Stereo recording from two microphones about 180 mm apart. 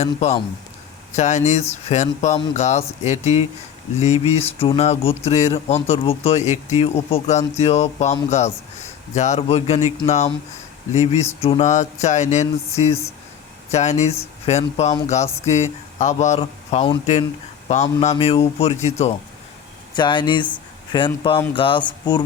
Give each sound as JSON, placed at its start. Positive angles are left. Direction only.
{"t": 0.0, "sound": "speech", "side_deg": 35}
{"t": 19.9, "sound": "speech", "side_deg": 25}